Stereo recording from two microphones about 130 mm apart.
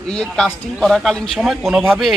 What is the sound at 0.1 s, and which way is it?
A man's voice, 5° left (ahead or behind).